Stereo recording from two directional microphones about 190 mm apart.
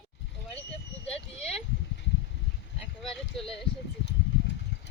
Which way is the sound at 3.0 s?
Centre (ahead or behind).